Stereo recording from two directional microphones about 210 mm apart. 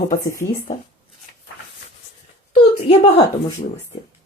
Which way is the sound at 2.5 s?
30° left (ahead or behind).